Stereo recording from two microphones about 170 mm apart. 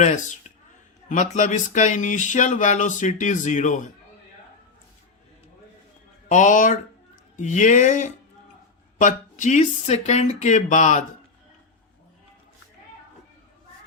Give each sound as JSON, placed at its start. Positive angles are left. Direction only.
{"t": 0.0, "sound": "speech", "side_deg": 45}
{"t": 6.2, "sound": "speech", "side_deg": 45}